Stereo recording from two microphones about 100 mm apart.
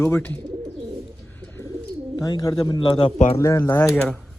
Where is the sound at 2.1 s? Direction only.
40° left (ahead or behind); by 3.1 s 55° left (ahead or behind).